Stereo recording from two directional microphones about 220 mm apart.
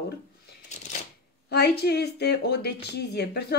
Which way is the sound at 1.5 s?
45° left (ahead or behind).